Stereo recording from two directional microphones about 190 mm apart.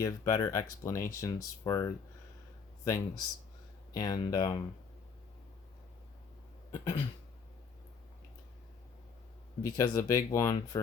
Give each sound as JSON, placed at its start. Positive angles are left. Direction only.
{"t": 0.0, "sound": "speech", "side_deg": 15}
{"t": 6.7, "sound": "cough", "side_deg": 15}
{"t": 9.7, "sound": "speech", "side_deg": 15}